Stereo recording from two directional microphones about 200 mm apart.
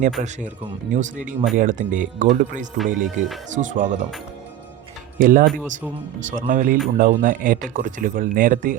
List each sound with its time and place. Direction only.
0.2 s speech: 40° right (ahead or behind)
2.7 s speech: centre (ahead or behind)
3.5 s speech: 40° right (ahead or behind)
5.2 s speech: 45° right (ahead or behind)
5.5 s speech: 5° right (ahead or behind)
6.3 s speech: 45° right (ahead or behind)